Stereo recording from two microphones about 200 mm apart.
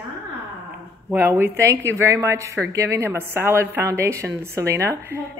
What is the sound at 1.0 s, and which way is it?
A woman's voice, 10° right (ahead or behind).